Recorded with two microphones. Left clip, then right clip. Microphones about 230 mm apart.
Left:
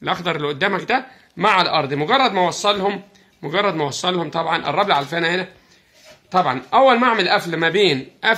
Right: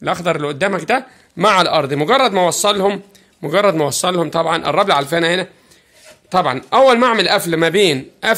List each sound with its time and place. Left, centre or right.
0.0 s speech: right